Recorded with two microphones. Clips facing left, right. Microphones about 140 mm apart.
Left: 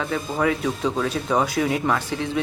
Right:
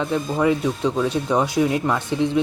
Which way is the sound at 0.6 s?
5° right (ahead or behind).